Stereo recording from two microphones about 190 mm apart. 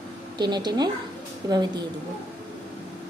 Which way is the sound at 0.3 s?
20° right (ahead or behind).